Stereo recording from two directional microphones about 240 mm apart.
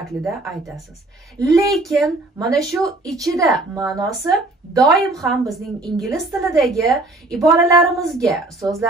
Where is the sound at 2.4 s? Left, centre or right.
Centre.